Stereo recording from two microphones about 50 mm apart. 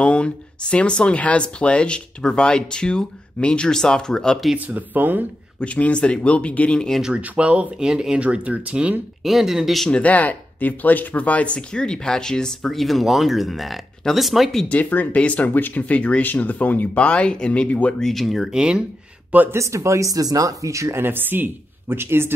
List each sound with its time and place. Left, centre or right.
0.0 s speech: left
4.6 s speech: right
5.6 s speech: left
7.2 s speech: right
7.8 s speech: centre
8.2 s speech: right
9.2 s speech: centre
10.0 s speech: left; by 12.5 s centre
12.6 s speech: centre
14.7 s speech: left
18.0 s speech: centre
18.5 s speech: centre
19.5 s speech: right
21.0 s speech: right